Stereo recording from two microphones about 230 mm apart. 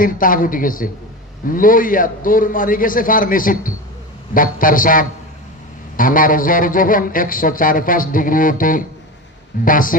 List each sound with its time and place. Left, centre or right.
0.0 s speech: left